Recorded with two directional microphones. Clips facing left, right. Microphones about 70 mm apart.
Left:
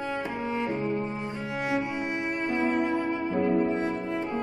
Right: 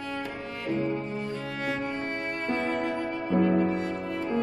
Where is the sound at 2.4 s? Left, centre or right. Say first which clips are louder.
Left 2 dB; centre.